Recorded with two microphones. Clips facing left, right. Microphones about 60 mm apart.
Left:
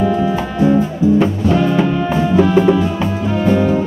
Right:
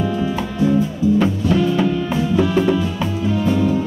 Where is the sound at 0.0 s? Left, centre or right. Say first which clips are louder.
Left 5 dB; left.